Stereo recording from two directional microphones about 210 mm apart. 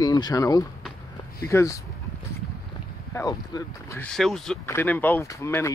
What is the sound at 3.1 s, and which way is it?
Speech, 15° left (ahead or behind).